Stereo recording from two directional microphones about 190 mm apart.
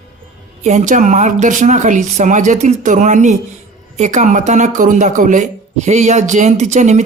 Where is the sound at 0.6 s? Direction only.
40° right (ahead or behind).